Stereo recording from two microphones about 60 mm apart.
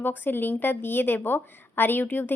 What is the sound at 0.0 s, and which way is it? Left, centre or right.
A woman's voice, left.